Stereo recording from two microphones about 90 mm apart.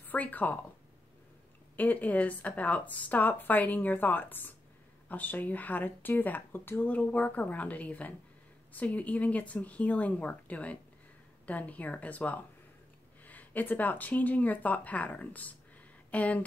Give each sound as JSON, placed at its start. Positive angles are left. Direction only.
{"t": 0.0, "sound": "speech", "side_deg": 20}
{"t": 1.8, "sound": "speech", "side_deg": 20}